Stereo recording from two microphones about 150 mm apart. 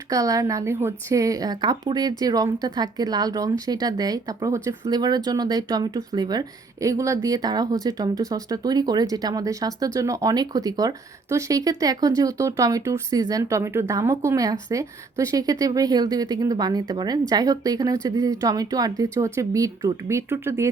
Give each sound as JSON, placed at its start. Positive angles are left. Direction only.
{"t": 0.1, "sound": "speech", "side_deg": -25}